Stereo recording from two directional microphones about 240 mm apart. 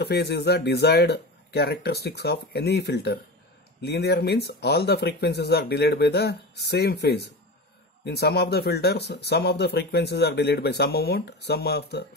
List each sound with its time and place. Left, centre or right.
0.0 s speech: left